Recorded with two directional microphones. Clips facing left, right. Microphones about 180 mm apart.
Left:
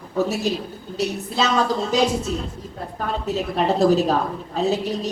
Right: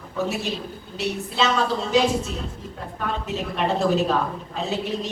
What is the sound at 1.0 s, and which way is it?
Speech, 40° left (ahead or behind).